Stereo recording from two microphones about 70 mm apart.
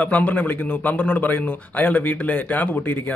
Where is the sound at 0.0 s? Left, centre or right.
Left.